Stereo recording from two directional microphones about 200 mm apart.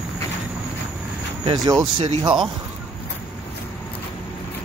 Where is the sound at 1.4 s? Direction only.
20° right (ahead or behind).